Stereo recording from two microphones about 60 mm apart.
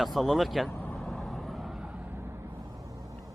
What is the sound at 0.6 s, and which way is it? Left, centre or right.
Vehicle, left.